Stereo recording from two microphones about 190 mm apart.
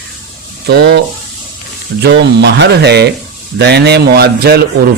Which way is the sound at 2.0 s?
60° right (ahead or behind).